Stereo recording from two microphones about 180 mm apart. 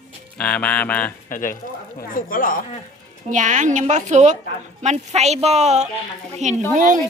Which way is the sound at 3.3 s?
45° right (ahead or behind).